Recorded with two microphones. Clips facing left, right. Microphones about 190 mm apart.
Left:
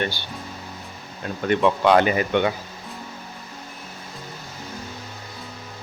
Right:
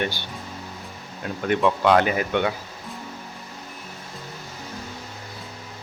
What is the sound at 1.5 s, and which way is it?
Speech, centre (ahead or behind).